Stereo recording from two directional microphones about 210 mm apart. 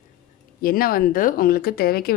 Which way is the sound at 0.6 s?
45° left (ahead or behind).